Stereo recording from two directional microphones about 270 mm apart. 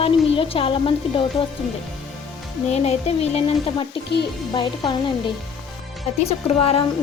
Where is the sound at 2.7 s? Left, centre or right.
Left.